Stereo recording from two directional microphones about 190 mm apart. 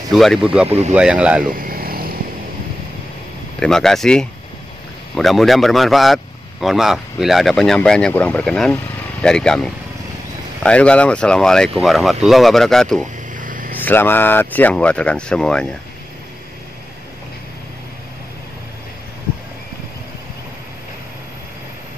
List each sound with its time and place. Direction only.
0.1 s a man's voice: centre (ahead or behind)
0.7 s speech: 35° right (ahead or behind)
0.9 s speech: 5° right (ahead or behind)
1.5 s vehicle: 50° right (ahead or behind)
3.5 s a man's voice: 5° left (ahead or behind)
13.3 s vehicle: 45° right (ahead or behind)
13.7 s speech: 10° left (ahead or behind)